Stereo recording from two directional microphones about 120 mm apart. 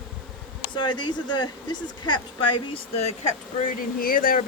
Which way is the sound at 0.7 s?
40° left (ahead or behind).